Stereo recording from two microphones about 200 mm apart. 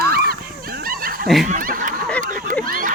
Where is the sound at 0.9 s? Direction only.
45° right (ahead or behind).